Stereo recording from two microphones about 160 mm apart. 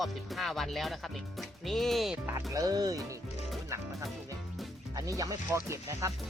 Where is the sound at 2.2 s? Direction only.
20° right (ahead or behind).